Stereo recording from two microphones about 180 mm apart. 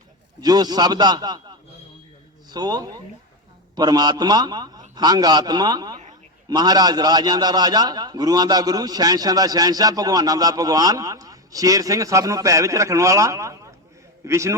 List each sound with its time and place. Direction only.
0.4 s a man's voice: 20° right (ahead or behind)